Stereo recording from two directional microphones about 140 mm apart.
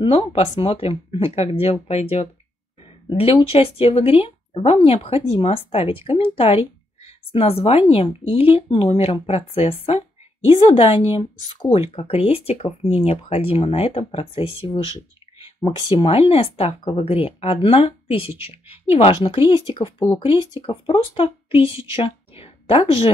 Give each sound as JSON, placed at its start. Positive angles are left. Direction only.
{"t": 0.0, "sound": "a woman's voice", "side_deg": 45}